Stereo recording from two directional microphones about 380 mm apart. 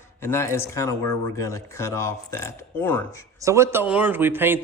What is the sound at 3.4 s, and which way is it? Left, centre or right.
A man's voice, centre.